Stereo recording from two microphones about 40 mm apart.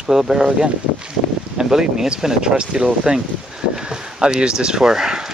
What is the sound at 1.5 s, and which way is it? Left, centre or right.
Speech, centre.